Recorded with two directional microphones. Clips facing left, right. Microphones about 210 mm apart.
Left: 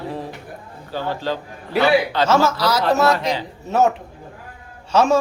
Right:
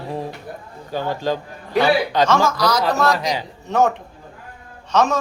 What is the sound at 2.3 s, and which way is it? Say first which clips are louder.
Speech: left 5 dB; 5° left (ahead or behind).